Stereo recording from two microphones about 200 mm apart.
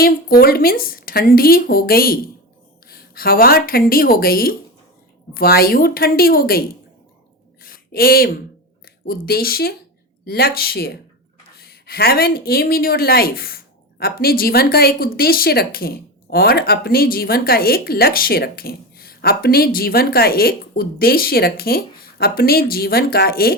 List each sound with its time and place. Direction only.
0.0 s a woman's voice: 50° left (ahead or behind)
7.6 s a sound: 45° left (ahead or behind)
8.8 s speech: 50° left (ahead or behind)